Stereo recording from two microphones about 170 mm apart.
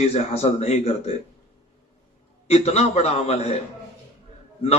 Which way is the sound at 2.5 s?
40° left (ahead or behind).